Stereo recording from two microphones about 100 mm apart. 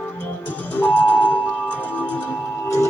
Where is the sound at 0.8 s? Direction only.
15° left (ahead or behind).